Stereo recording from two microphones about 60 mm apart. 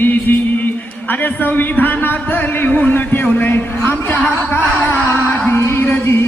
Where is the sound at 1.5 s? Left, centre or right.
Left.